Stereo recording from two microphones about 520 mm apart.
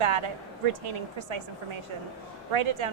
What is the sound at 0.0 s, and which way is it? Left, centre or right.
Speech, right.